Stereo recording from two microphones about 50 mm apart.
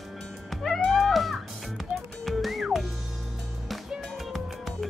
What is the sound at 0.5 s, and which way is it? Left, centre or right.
Music, centre.